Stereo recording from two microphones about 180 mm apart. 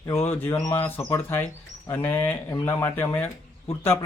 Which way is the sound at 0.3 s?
10° left (ahead or behind).